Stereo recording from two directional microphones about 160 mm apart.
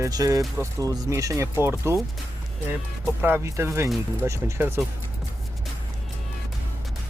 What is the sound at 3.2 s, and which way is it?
Speech, 15° right (ahead or behind).